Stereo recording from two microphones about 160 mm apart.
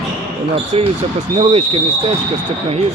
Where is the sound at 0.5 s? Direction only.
35° right (ahead or behind).